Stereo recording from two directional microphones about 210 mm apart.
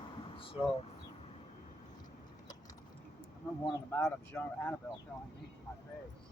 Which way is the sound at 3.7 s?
10° left (ahead or behind).